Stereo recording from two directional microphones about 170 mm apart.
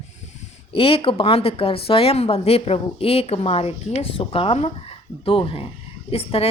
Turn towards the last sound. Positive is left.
turn(degrees=35)  # may be behind; listen again after turning